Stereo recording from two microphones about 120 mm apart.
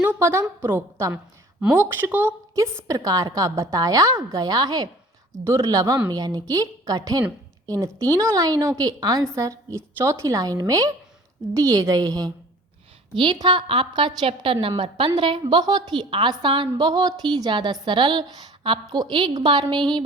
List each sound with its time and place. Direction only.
0.0 s a woman's voice: 15° right (ahead or behind); by 19.6 s 35° right (ahead or behind)